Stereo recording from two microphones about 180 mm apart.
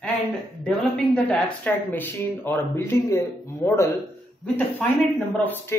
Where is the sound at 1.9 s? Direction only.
10° left (ahead or behind).